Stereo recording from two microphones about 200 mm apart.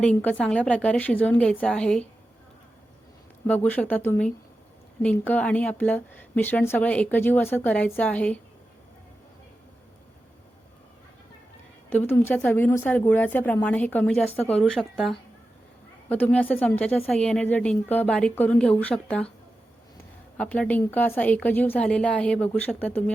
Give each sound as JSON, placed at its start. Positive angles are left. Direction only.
{"t": 0.0, "sound": "a woman's voice", "side_deg": 5}
{"t": 3.4, "sound": "a woman's voice", "side_deg": 10}
{"t": 11.9, "sound": "a woman's voice", "side_deg": 10}
{"t": 20.3, "sound": "a woman's voice", "side_deg": 5}